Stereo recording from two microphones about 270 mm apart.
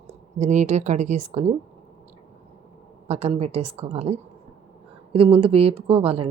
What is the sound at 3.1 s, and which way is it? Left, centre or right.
A woman's voice, right.